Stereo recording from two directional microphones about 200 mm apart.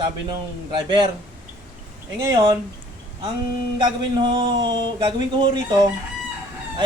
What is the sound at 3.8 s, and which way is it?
Speech, 20° right (ahead or behind).